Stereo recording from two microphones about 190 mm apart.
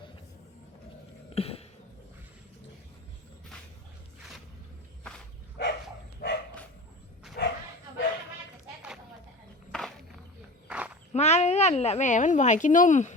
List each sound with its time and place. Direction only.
1.4 s a sound: 30° left (ahead or behind)
5.6 s dog: 60° left (ahead or behind)
7.4 s bow-wow: 65° left (ahead or behind)
9.7 s a sound: centre (ahead or behind)
10.7 s walk: 5° right (ahead or behind)
11.1 s a woman's voice: 35° left (ahead or behind)